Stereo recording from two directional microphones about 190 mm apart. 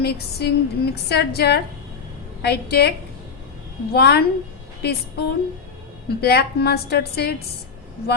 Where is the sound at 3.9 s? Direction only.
55° left (ahead or behind).